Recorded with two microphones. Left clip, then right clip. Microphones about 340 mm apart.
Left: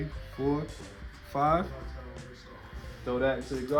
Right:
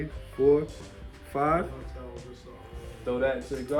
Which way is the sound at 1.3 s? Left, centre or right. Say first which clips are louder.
Right 1 dB; left.